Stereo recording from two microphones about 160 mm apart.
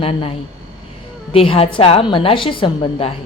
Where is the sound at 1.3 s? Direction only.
35° left (ahead or behind).